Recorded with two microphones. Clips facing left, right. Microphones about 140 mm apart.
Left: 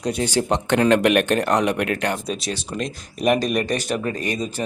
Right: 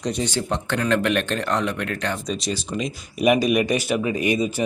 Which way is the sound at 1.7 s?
65° left (ahead or behind).